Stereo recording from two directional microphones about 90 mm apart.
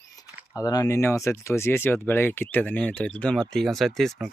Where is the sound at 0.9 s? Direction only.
30° left (ahead or behind).